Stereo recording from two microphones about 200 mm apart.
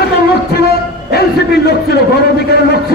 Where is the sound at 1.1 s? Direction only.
55° left (ahead or behind).